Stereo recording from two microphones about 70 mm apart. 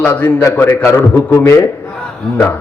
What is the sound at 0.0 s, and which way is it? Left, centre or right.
A man's voice, left.